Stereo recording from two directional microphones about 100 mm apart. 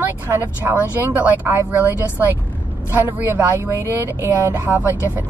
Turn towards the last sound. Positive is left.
turn(degrees=-15)  # may be behind; listen again after turning